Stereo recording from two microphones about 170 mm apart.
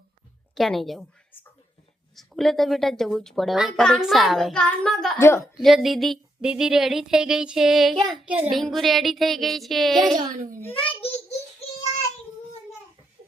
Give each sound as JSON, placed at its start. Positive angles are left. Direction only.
{"t": 0.5, "sound": "a woman's voice", "side_deg": 0}
{"t": 2.1, "sound": "a woman's voice", "side_deg": 0}
{"t": 5.2, "sound": "a woman's voice", "side_deg": 15}
{"t": 5.5, "sound": "a woman's voice", "side_deg": 0}
{"t": 10.7, "sound": "a sound", "side_deg": 30}